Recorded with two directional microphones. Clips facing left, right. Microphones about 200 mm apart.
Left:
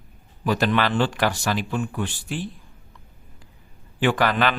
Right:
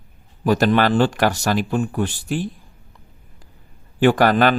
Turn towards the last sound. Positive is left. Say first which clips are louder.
# right 6 dB
turn(degrees=-45)  # may be behind; listen again after turning